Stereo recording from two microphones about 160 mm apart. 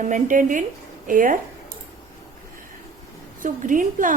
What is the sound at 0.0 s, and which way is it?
A woman's voice, 55° right (ahead or behind).